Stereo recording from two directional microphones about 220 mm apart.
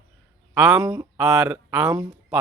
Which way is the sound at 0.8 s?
15° right (ahead or behind).